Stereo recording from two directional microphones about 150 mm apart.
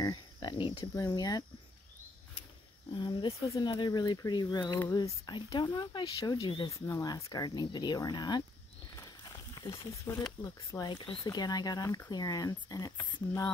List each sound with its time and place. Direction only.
0.0 s cricket: 30° left (ahead or behind)
0.9 s speech: 25° left (ahead or behind)
2.9 s speech: 30° left (ahead or behind)